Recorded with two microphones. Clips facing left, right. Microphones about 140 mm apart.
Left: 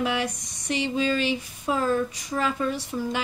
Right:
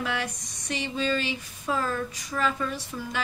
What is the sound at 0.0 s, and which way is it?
A woman's voice, 20° left (ahead or behind).